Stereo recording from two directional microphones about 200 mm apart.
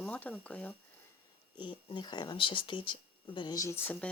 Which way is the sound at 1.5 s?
25° left (ahead or behind).